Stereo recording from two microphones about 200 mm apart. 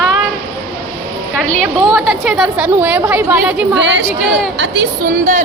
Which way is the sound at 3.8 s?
65° right (ahead or behind).